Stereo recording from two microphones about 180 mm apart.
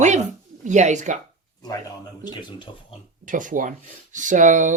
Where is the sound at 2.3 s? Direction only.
25° left (ahead or behind).